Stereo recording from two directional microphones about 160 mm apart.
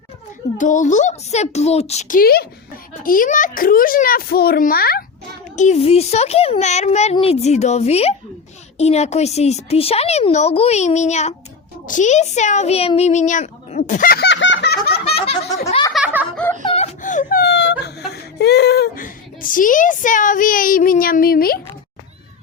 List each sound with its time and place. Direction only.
0.5 s a child's voice: 50° left (ahead or behind); by 2.5 s 75° left (ahead or behind)
3.0 s a child's voice: 60° left (ahead or behind)
5.5 s a child's voice: 45° left (ahead or behind); by 14.9 s 85° left
15.0 s snicker: 40° left (ahead or behind)
15.9 s a sound: centre (ahead or behind)
16.6 s whimper: 40° left (ahead or behind); by 21.6 s 70° left (ahead or behind)